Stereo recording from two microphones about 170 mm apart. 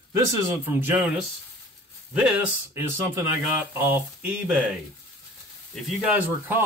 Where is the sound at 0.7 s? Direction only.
10° right (ahead or behind).